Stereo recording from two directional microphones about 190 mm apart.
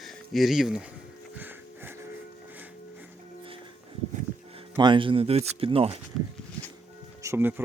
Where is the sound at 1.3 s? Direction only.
10° right (ahead or behind).